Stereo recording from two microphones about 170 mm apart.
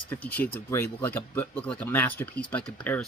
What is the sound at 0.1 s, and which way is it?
Speech, 10° left (ahead or behind).